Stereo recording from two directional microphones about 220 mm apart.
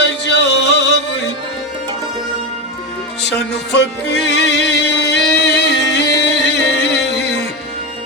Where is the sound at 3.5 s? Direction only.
50° left (ahead or behind).